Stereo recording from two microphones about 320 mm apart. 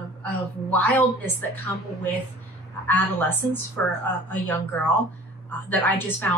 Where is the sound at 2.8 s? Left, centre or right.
Centre.